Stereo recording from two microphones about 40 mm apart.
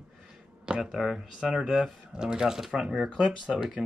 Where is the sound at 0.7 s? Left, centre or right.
Centre.